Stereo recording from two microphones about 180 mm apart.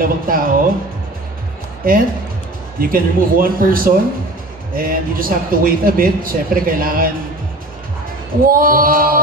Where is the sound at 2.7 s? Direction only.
55° right (ahead or behind).